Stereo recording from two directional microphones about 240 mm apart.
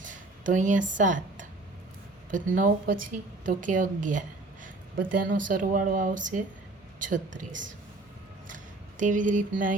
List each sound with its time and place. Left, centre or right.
0.0 s a sound: right
2.3 s speech: right
8.4 s speech: right